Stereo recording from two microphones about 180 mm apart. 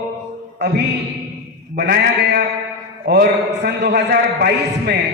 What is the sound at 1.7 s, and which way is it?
A man's voice, 65° right (ahead or behind).